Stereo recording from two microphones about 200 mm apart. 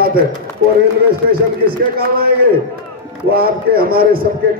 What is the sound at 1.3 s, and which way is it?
A man's voice, 50° right (ahead or behind).